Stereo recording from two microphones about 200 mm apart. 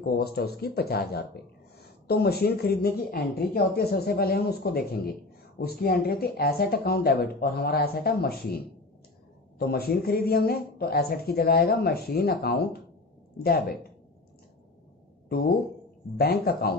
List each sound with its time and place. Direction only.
0.0 s speech: 50° left (ahead or behind)
9.6 s speech: 50° left (ahead or behind)
15.2 s speech: 50° left (ahead or behind)